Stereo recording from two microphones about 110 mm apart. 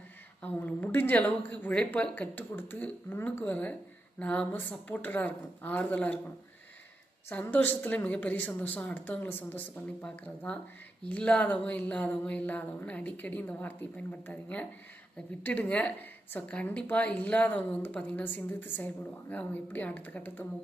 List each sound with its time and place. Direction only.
0.4 s a woman's voice: 15° left (ahead or behind)
7.3 s a woman's voice: 15° left (ahead or behind)